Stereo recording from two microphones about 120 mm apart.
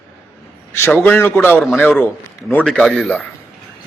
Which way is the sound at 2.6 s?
5° left (ahead or behind).